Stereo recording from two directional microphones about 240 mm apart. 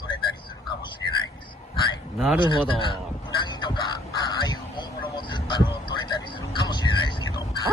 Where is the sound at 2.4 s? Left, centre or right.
Centre.